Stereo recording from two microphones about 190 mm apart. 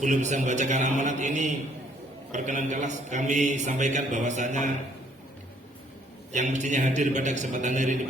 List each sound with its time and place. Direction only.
0.0 s a man's voice: 40° right (ahead or behind)
6.3 s a man's voice: 40° right (ahead or behind)